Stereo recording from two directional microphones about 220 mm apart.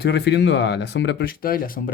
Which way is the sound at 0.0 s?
50° left (ahead or behind).